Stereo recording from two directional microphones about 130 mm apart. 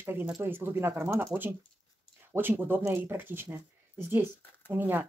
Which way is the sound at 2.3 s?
15° right (ahead or behind).